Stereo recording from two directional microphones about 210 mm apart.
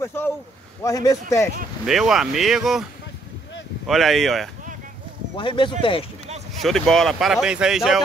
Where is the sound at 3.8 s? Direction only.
Centre (ahead or behind).